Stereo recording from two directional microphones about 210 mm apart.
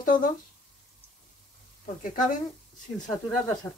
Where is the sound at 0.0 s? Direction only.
40° left (ahead or behind).